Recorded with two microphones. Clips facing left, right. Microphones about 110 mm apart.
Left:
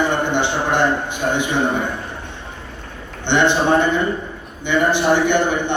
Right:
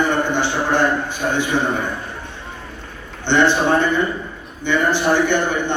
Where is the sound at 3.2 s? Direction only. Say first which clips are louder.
Even; 20° left (ahead or behind).